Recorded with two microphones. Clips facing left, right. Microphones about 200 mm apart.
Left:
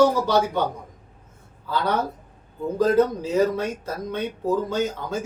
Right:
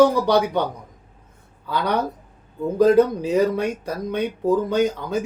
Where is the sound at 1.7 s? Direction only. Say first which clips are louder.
Right 1 dB; 15° right (ahead or behind).